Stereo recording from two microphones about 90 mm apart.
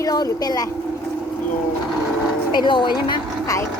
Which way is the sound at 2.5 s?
60° left (ahead or behind).